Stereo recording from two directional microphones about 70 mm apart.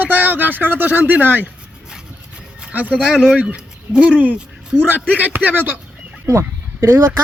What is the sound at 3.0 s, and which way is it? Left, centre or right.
Speech, centre.